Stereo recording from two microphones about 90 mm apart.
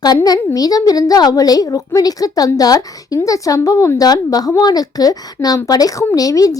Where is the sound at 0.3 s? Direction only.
45° left (ahead or behind).